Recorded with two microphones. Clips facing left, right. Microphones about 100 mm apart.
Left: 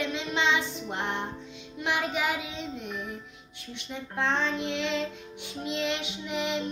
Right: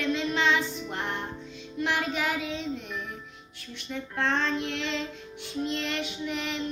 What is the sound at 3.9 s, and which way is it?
Child singing, 15° left (ahead or behind).